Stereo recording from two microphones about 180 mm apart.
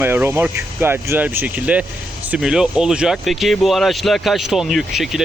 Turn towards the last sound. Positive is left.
turn(degrees=0)  # may be behind; listen again after turning